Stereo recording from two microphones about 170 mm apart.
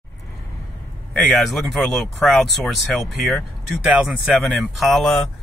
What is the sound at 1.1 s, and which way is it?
Speech, centre (ahead or behind).